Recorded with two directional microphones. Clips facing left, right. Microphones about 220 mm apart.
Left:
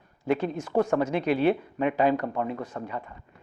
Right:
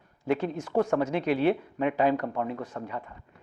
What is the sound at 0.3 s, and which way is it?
Speech, 10° left (ahead or behind).